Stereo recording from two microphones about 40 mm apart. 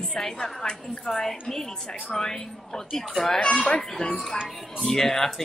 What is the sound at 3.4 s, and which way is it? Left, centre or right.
Speech, left.